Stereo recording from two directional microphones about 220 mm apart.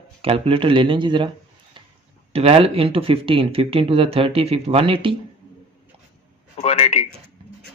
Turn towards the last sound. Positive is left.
turn(degrees=30)  # may be behind; listen again after turning